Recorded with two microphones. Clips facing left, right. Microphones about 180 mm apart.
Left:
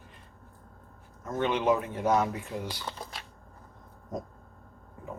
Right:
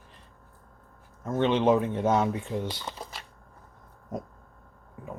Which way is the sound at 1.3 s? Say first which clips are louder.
Right 4 dB; 25° right (ahead or behind).